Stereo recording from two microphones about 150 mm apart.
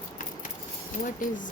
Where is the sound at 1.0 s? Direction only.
60° left (ahead or behind).